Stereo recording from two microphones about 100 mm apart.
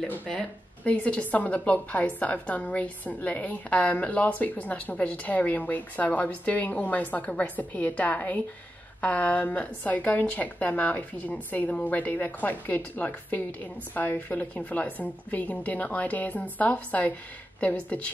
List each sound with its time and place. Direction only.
0.8 s a woman's voice: 15° left (ahead or behind)